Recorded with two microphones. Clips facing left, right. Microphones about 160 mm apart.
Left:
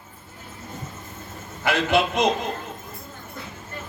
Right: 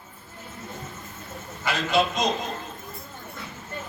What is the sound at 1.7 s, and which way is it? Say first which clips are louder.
Speech: left 3 dB; 60° left (ahead or behind).